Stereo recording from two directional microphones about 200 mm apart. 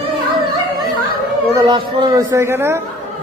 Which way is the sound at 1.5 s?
20° right (ahead or behind).